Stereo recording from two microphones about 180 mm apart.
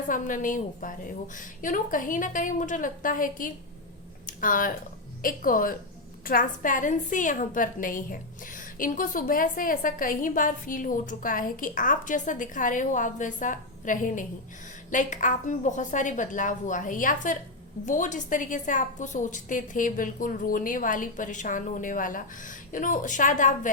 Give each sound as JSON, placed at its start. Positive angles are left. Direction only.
{"t": 0.1, "sound": "a woman's voice", "side_deg": 45}